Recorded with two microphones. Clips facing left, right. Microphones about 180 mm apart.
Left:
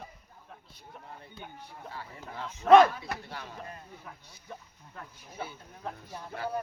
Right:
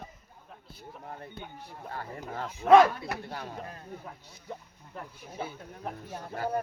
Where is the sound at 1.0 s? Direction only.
50° right (ahead or behind).